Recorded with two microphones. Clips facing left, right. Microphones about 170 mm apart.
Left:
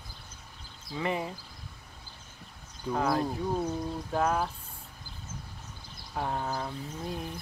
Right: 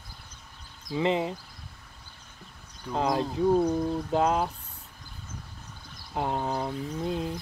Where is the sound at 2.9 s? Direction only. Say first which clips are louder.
Right 1 dB; 20° right (ahead or behind).